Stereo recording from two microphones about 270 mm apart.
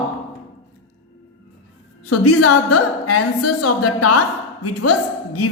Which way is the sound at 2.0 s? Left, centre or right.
Left.